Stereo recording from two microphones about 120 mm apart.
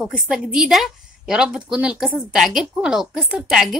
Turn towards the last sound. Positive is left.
turn(degrees=-5)  # may be behind; listen again after turning